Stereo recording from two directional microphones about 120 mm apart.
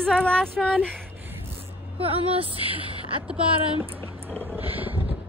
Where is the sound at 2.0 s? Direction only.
50° right (ahead or behind).